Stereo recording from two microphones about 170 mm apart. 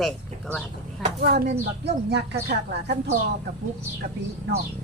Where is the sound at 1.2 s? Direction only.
70° right (ahead or behind).